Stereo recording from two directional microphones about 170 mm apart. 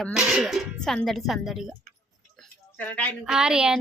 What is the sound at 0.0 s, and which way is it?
Speech, 5° right (ahead or behind).